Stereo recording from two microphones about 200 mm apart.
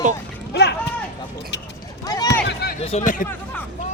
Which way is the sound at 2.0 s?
20° left (ahead or behind).